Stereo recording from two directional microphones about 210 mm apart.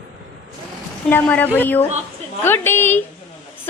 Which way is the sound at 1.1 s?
10° left (ahead or behind).